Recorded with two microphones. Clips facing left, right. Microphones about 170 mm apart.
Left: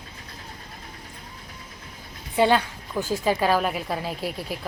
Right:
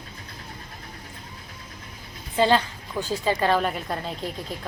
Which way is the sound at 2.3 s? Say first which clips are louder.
Even; 10° left (ahead or behind).